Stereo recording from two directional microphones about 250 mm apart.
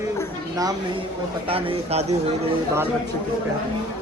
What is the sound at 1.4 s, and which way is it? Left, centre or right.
Speech, right.